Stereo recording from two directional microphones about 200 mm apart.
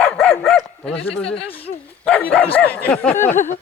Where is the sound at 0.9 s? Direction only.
30° left (ahead or behind).